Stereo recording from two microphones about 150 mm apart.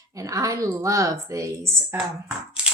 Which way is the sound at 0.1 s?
20° right (ahead or behind).